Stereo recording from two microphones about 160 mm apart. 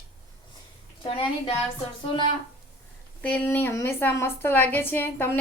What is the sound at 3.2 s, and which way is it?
A woman's voice, 10° left (ahead or behind).